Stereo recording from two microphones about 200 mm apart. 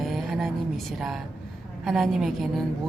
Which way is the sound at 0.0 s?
Centre (ahead or behind).